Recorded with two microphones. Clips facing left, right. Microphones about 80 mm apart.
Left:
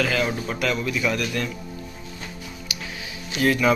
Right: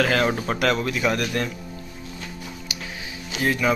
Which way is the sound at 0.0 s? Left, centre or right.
Right.